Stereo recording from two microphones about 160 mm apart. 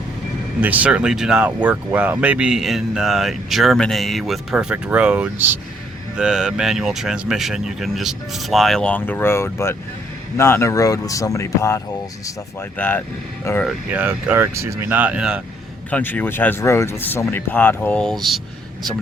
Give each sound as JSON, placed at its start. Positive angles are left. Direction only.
{"t": 0.6, "sound": "speech", "side_deg": -10}
{"t": 13.7, "sound": "speech", "side_deg": -10}
{"t": 15.9, "sound": "speech", "side_deg": 10}